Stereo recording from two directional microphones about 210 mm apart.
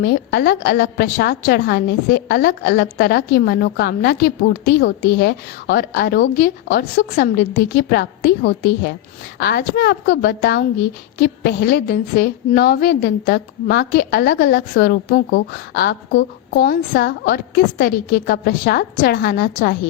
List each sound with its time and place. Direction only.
0.0 s a woman's voice: 50° left (ahead or behind)